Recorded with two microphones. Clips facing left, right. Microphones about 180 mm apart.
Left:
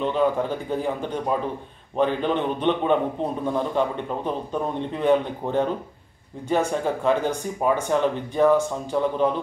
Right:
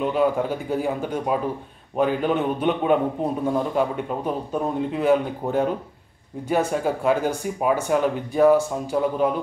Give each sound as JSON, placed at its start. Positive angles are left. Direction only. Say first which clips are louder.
{"t": 0.0, "sound": "speech", "louder": "right 1 dB", "side_deg": -10}